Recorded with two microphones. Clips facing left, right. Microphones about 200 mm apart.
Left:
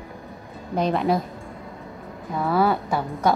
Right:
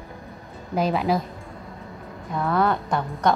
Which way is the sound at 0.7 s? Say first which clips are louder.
Left 1 dB; 5° right (ahead or behind).